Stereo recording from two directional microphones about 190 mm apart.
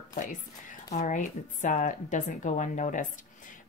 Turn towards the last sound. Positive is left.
turn(degrees=40)  # may be behind; listen again after turning